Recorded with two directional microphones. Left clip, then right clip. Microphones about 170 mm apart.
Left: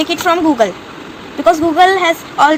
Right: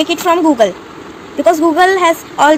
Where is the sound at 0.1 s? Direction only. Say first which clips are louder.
Even; 35° right (ahead or behind).